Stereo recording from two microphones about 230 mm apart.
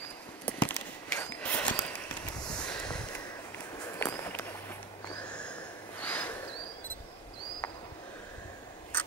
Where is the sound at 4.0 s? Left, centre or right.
Centre.